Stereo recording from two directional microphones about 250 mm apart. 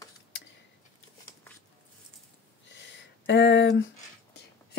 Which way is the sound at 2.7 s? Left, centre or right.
Left.